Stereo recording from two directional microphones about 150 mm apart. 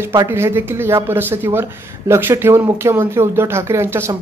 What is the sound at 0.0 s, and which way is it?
A woman's voice, 20° right (ahead or behind).